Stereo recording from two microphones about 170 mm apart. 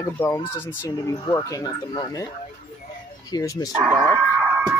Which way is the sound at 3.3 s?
20° left (ahead or behind).